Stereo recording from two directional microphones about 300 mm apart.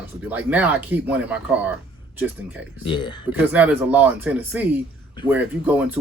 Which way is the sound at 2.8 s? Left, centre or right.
Centre.